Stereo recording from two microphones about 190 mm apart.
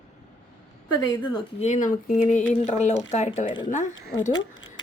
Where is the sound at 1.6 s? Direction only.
40° left (ahead or behind).